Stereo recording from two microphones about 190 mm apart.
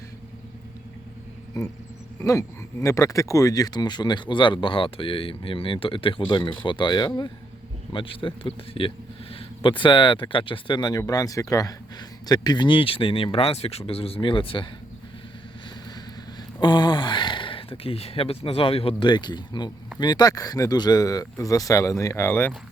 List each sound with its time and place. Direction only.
2.1 s speech: 15° left (ahead or behind)
16.6 s speech: 25° left (ahead or behind)